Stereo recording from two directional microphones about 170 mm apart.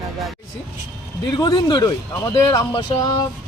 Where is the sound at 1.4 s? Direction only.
25° left (ahead or behind).